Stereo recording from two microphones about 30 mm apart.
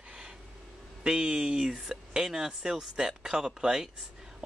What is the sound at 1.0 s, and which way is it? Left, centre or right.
Speech, right.